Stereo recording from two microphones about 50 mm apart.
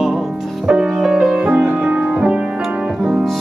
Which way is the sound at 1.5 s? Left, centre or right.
Right.